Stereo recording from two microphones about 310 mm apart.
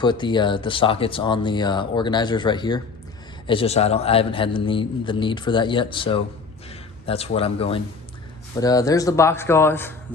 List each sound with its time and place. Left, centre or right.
0.0 s a man's voice: centre